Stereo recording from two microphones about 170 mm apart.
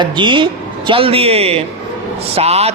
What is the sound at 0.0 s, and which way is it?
A man's voice, 30° right (ahead or behind).